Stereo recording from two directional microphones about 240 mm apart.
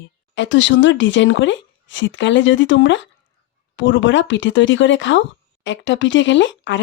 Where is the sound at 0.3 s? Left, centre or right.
Left.